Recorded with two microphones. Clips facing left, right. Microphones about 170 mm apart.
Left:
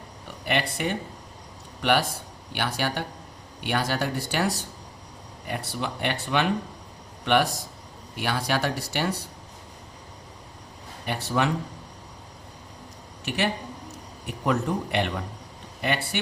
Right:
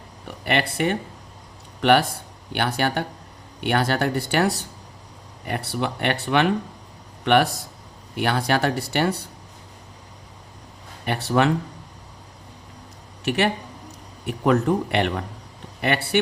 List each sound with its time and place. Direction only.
0.4 s speech: 60° right (ahead or behind)
8.1 s speech: 60° right (ahead or behind)
11.0 s speech: 60° right (ahead or behind)
13.2 s speech: 60° right (ahead or behind)